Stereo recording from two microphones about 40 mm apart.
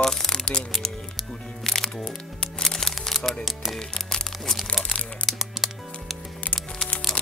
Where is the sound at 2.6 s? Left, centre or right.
Centre.